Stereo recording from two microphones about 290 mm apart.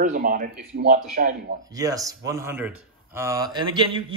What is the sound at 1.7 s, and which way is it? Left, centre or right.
A man's voice, centre.